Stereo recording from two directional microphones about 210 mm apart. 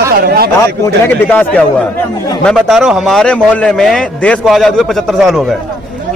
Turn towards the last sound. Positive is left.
turn(degrees=0)  # may be behind; listen again after turning